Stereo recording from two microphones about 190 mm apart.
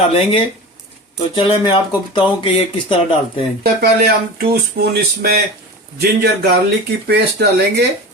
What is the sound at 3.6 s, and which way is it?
Speech, 55° right (ahead or behind).